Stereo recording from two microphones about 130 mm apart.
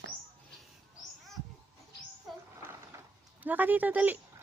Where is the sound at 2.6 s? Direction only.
20° right (ahead or behind).